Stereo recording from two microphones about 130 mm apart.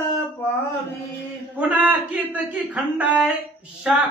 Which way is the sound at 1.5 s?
10° right (ahead or behind).